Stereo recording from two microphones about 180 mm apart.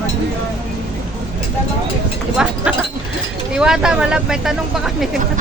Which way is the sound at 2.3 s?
5° right (ahead or behind).